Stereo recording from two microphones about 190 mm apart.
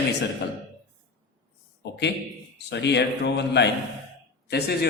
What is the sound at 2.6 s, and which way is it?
A man's voice, 65° left (ahead or behind).